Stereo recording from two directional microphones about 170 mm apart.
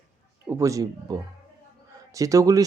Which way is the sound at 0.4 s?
15° right (ahead or behind).